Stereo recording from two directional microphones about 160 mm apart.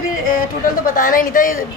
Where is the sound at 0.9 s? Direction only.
60° left (ahead or behind).